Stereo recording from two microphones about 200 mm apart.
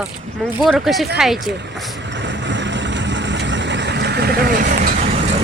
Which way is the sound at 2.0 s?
65° right (ahead or behind).